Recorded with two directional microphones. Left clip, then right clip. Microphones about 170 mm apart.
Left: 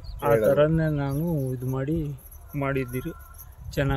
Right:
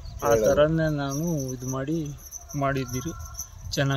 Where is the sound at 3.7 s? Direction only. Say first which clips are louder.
Even; 20° left (ahead or behind).